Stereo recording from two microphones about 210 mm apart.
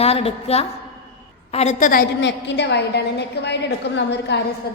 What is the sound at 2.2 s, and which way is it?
A woman's voice, 55° left (ahead or behind).